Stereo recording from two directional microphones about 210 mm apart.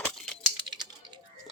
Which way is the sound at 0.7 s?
20° right (ahead or behind).